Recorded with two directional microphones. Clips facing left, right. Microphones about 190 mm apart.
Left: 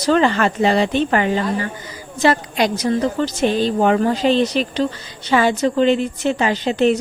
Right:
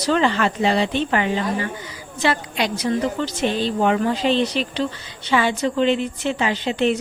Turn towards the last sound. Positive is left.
turn(degrees=40)  # may be behind; listen again after turning